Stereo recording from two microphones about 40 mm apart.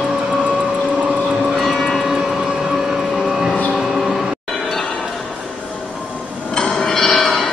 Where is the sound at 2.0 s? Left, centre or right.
Centre.